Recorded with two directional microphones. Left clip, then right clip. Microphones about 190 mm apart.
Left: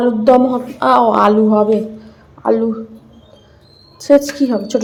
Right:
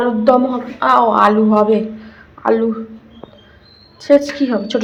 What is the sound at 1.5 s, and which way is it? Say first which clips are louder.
A man's voice: even; 25° left (ahead or behind).